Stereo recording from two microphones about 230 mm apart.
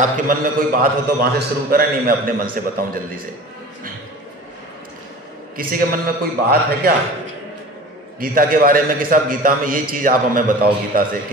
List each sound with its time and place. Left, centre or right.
0.3 s a man's voice: right
5.6 s a man's voice: right
8.2 s a man's voice: right